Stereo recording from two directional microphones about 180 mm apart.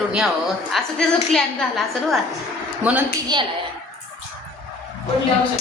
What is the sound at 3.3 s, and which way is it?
Speech, 25° right (ahead or behind).